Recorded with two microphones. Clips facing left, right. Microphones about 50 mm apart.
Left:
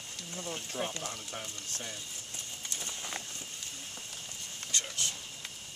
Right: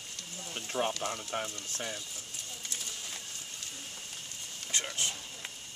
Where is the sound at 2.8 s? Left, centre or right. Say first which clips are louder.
Left 3 dB; left.